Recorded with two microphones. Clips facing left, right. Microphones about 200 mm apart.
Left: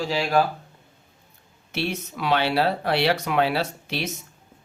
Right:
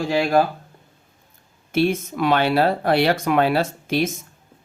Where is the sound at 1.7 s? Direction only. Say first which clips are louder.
Right 9 dB; 50° right (ahead or behind).